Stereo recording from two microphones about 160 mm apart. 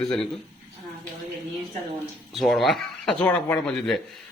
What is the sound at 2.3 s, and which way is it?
A man's voice, centre (ahead or behind).